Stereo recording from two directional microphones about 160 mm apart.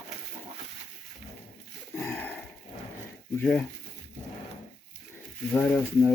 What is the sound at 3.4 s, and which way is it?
Speech, 10° left (ahead or behind).